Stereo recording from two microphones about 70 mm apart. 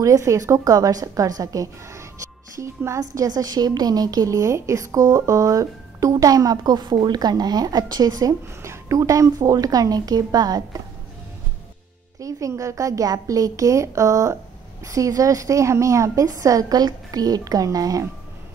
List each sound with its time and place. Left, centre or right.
0.0 s a woman's voice: right
3.0 s a woman's voice: right
8.6 s a woman's voice: right
12.2 s a woman's voice: right